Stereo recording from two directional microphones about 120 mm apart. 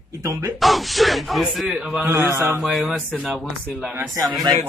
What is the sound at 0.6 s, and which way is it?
Speech, centre (ahead or behind).